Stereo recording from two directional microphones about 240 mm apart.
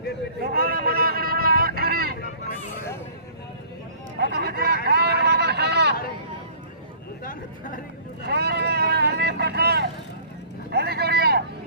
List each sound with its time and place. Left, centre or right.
0.5 s vehicle: right
4.2 s a sound: right
8.2 s vehicle: right